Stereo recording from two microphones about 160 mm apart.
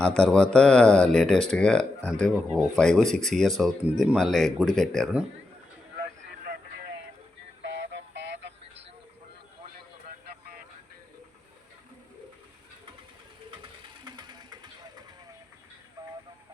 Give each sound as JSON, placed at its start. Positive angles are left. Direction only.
{"t": 0.0, "sound": "speech", "side_deg": 5}
{"t": 7.6, "sound": "music", "side_deg": -90}
{"t": 14.0, "sound": "sewing machine", "side_deg": -25}
{"t": 16.0, "sound": "a sound", "side_deg": -25}